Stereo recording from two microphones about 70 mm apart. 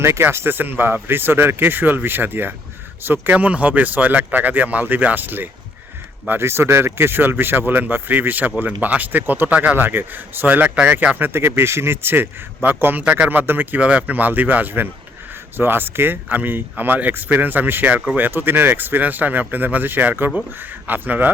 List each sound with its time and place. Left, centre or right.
0.0 s speech: right
11.3 s speech: right